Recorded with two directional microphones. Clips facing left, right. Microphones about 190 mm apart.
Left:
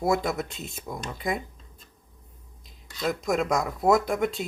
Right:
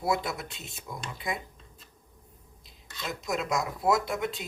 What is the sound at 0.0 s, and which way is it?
Speech, 45° left (ahead or behind).